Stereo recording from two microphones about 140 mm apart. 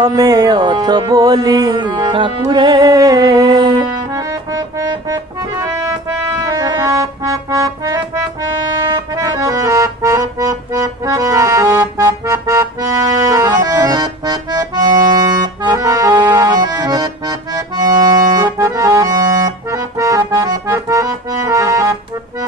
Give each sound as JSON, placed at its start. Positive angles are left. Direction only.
{"t": 0.0, "sound": "music", "side_deg": -25}
{"t": 6.4, "sound": "accordion", "side_deg": -25}